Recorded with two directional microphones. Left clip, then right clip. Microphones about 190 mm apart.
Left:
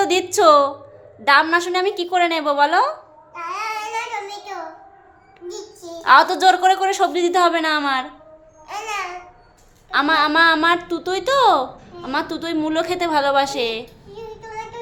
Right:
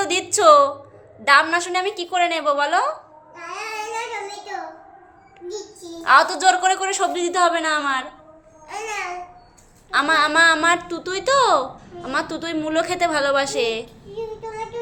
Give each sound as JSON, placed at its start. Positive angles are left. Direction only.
{"t": 0.0, "sound": "a woman's voice", "side_deg": 15}
{"t": 6.0, "sound": "a woman's voice", "side_deg": 20}
{"t": 9.9, "sound": "a woman's voice", "side_deg": 10}